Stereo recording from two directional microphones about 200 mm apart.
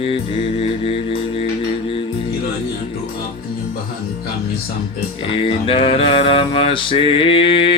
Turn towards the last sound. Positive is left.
turn(degrees=25)  # may be behind; listen again after turning